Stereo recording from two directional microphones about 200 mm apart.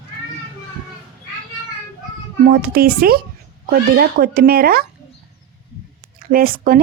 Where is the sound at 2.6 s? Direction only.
50° right (ahead or behind).